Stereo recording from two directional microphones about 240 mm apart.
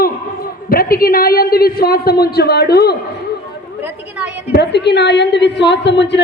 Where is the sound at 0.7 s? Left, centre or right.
Left.